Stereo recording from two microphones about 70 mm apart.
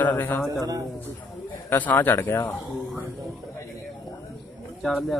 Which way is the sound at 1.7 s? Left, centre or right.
Left.